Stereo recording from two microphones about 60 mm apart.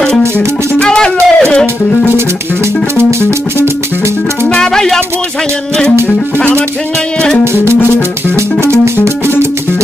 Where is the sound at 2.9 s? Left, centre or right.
Right.